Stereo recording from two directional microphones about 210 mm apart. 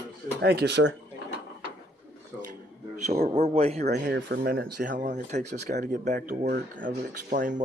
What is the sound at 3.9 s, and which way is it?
Speech, 60° right (ahead or behind).